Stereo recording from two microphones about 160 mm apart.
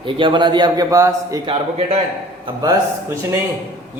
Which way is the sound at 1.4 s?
35° right (ahead or behind).